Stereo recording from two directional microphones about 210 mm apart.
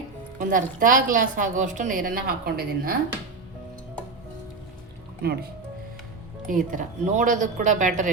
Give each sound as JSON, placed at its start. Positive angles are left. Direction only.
{"t": 0.3, "sound": "a woman's voice", "side_deg": -40}
{"t": 6.5, "sound": "a woman's voice", "side_deg": -40}